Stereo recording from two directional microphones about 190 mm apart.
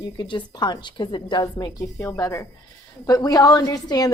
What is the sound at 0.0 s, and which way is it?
A woman's voice, 25° left (ahead or behind).